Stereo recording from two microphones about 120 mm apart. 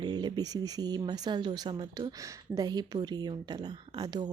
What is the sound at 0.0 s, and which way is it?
Speech, 40° right (ahead or behind).